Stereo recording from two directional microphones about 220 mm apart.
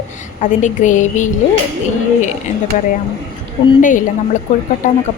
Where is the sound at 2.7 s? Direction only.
35° left (ahead or behind).